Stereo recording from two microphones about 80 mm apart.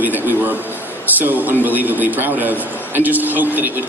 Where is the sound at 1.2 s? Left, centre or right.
Right.